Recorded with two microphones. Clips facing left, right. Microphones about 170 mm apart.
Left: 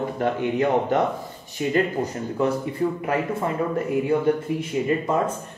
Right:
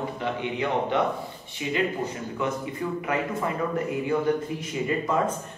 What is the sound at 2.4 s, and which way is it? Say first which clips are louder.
Speech: left 7 dB; 35° left (ahead or behind).